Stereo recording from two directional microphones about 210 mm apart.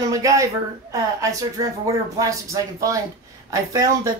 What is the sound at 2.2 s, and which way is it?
Speech, 15° right (ahead or behind).